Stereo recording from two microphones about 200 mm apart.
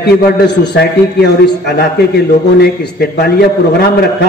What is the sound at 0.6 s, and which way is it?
A man's voice, 55° left (ahead or behind).